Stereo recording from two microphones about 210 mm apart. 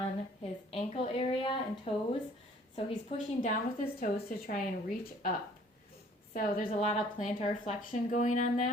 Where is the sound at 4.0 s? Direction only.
40° left (ahead or behind).